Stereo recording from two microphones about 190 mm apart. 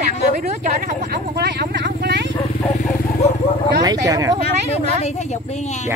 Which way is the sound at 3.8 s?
20° right (ahead or behind).